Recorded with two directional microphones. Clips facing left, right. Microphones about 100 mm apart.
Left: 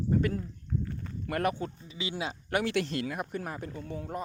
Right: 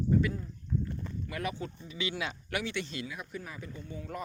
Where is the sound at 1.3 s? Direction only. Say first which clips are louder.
Left 8 dB; 55° left (ahead or behind).